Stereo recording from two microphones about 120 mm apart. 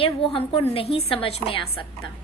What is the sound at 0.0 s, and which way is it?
A woman's voice, 50° left (ahead or behind).